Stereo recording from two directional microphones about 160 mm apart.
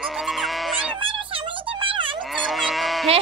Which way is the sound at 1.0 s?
35° right (ahead or behind).